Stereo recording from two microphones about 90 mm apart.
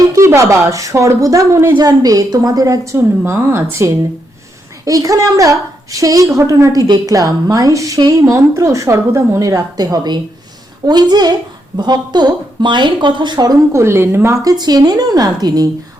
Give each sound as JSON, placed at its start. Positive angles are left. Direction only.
{"t": 0.0, "sound": "a woman's voice", "side_deg": -35}
{"t": 13.7, "sound": "a woman's voice", "side_deg": -30}
{"t": 14.3, "sound": "speech", "side_deg": -45}